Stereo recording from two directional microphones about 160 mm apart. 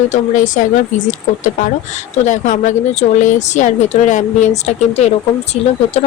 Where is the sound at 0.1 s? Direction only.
50° left (ahead or behind).